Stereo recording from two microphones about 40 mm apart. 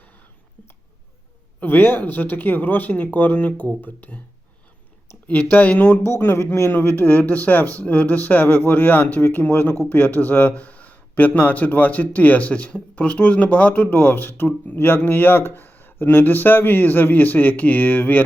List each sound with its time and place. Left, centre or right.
1.6 s speech: left
5.3 s speech: left
6.1 s speech: left